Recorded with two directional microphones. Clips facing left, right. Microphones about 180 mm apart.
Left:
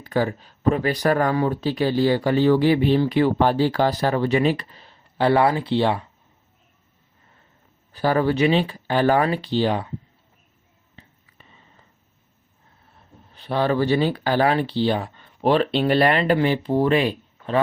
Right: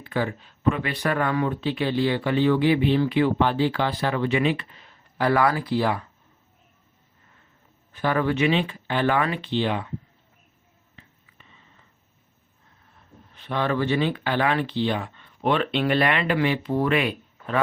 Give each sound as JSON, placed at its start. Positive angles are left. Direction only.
{"t": 0.0, "sound": "speech", "side_deg": 40}
{"t": 7.9, "sound": "speech", "side_deg": 35}
{"t": 10.9, "sound": "a sound", "side_deg": 35}
{"t": 13.3, "sound": "speech", "side_deg": 35}